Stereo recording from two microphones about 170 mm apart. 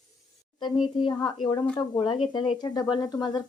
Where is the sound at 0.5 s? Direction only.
25° left (ahead or behind).